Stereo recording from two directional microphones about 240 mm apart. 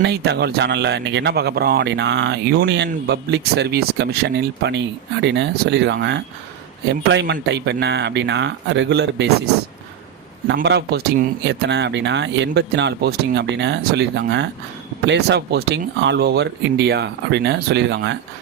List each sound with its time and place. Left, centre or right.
0.0 s speech: right
10.5 s speech: right